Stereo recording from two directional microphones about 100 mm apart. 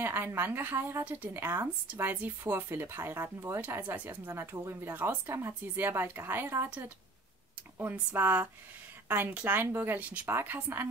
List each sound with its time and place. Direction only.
0.0 s speech: 20° right (ahead or behind)